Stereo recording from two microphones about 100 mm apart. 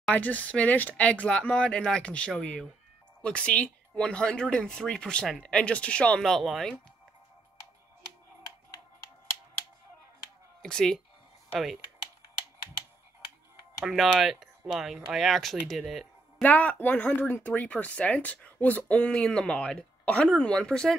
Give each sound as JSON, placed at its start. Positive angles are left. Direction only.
{"t": 0.1, "sound": "speech", "side_deg": 15}
{"t": 10.6, "sound": "speech", "side_deg": 5}
{"t": 13.8, "sound": "speech", "side_deg": 0}
{"t": 16.4, "sound": "speech", "side_deg": 15}